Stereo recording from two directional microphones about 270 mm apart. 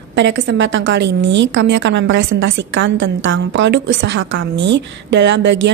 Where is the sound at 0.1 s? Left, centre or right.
Right.